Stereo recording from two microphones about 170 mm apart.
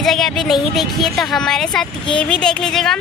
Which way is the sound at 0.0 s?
Centre (ahead or behind).